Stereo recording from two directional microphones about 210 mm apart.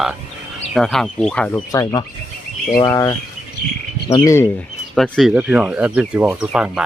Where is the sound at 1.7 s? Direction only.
20° left (ahead or behind).